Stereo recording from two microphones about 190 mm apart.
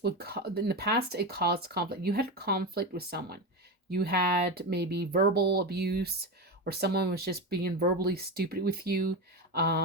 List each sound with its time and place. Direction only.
0.0 s speech: 55° right (ahead or behind)